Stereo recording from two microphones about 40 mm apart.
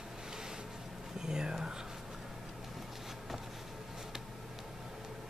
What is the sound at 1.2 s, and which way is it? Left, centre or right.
Speech, centre.